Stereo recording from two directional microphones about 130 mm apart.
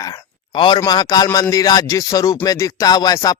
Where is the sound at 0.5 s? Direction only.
40° left (ahead or behind).